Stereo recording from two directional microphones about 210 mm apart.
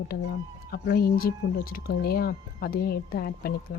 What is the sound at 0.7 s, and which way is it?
Speech, 45° left (ahead or behind).